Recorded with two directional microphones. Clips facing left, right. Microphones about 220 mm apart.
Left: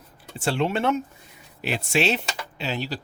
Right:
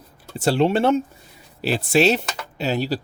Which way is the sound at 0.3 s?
35° right (ahead or behind).